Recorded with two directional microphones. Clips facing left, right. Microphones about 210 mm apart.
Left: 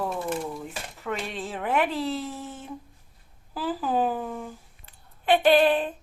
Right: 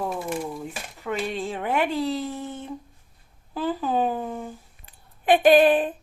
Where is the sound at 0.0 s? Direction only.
Centre (ahead or behind).